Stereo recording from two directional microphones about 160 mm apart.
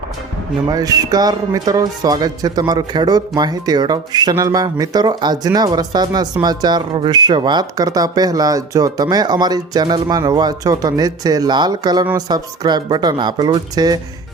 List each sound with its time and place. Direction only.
0.7 s speech: 25° right (ahead or behind)